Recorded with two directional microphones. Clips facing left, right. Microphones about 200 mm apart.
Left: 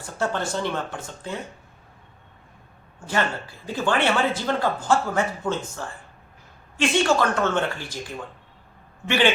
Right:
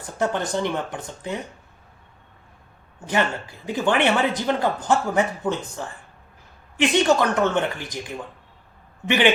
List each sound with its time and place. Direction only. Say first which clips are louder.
0.2 s a man's voice: right 2 dB; 15° right (ahead or behind)
3.1 s a man's voice: right 2 dB; 15° right (ahead or behind)
9.0 s a man's voice: right 2 dB; 20° right (ahead or behind)